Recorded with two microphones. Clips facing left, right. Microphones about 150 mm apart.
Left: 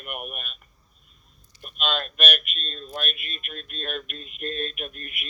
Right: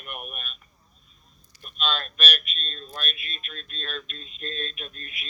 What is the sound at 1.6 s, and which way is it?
Speech, 50° left (ahead or behind).